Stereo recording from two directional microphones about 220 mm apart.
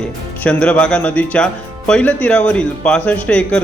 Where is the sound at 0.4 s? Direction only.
5° left (ahead or behind).